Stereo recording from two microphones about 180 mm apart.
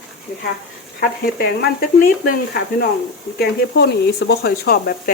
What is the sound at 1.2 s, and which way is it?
Speech, 55° left (ahead or behind).